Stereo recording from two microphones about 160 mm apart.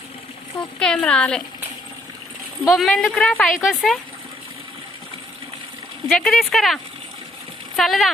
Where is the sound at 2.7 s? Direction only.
Centre (ahead or behind).